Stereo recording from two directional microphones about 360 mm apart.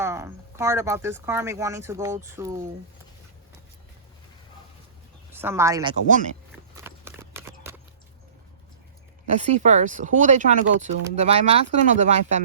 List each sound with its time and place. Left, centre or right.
0.0 s speech: centre
5.3 s speech: centre
6.7 s horse: centre
9.4 s speech: centre